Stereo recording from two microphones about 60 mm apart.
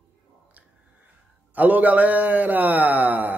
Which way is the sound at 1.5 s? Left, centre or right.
Right.